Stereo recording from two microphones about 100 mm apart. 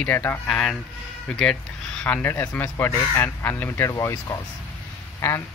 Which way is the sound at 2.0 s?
20° left (ahead or behind).